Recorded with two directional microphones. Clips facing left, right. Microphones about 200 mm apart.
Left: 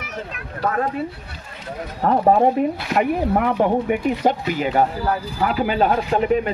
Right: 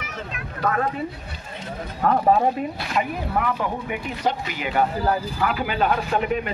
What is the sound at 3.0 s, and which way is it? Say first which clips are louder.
Speech: left 6 dB; 55° left (ahead or behind).